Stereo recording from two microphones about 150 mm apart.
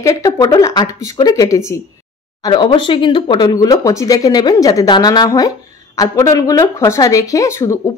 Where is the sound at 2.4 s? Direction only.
30° left (ahead or behind).